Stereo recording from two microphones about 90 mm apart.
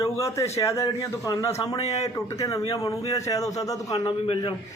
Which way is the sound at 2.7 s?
45° left (ahead or behind).